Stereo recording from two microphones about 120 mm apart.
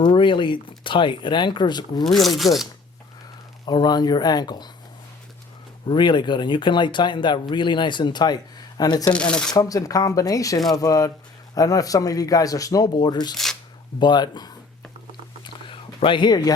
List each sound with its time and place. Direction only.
0.0 s speech: 40° left (ahead or behind)
2.0 s speech: centre (ahead or behind)
3.7 s speech: 35° left (ahead or behind)
5.9 s speech: 40° left (ahead or behind)
9.0 s speech: 10° left (ahead or behind)
9.6 s speech: 30° left (ahead or behind)
13.3 s a sound: centre (ahead or behind)
14.0 s speech: 35° left (ahead or behind)
15.6 s a sound: 45° left (ahead or behind)